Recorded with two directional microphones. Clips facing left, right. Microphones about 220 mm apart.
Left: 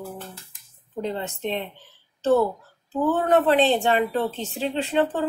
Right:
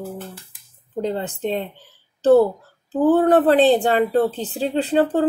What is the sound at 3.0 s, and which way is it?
A woman's voice, 35° right (ahead or behind).